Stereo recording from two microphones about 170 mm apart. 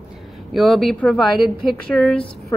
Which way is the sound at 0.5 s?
Centre (ahead or behind).